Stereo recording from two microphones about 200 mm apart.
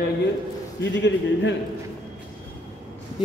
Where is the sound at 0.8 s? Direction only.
65° left (ahead or behind).